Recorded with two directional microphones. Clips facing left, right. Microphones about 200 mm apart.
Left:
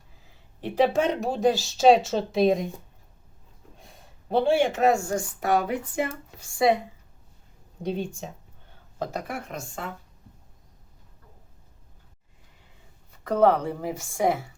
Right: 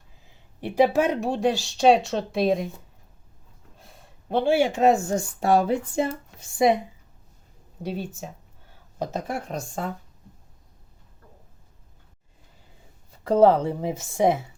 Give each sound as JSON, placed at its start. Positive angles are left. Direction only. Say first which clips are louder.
{"t": 0.6, "sound": "speech", "louder": "right 2 dB", "side_deg": -10}
{"t": 3.8, "sound": "speech", "louder": "right 3 dB", "side_deg": 0}
{"t": 7.8, "sound": "speech", "louder": "left 2 dB", "side_deg": -5}
{"t": 9.0, "sound": "speech", "louder": "right 2 dB", "side_deg": -25}
{"t": 13.2, "sound": "speech", "louder": "right 3 dB", "side_deg": -25}